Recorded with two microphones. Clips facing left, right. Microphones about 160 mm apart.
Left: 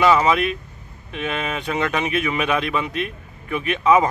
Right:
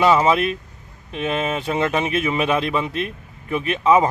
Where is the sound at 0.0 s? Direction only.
30° right (ahead or behind).